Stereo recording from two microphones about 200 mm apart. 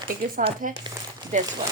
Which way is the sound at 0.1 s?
45° right (ahead or behind).